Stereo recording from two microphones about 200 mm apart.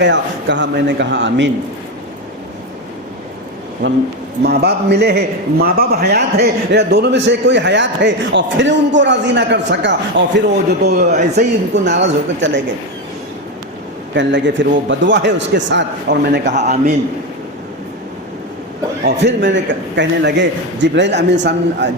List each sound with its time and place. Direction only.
0.0 s a man's voice: 60° right (ahead or behind)
4.4 s a man's voice: 55° right (ahead or behind)
14.1 s a man's voice: 65° right (ahead or behind)
16.5 s a man's voice: 35° right (ahead or behind)
19.0 s a man's voice: 60° right (ahead or behind)